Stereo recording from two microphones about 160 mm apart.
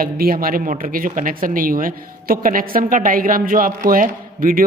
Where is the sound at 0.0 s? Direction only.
65° right (ahead or behind).